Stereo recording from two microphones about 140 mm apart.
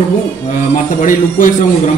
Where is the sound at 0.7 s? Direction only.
75° left (ahead or behind).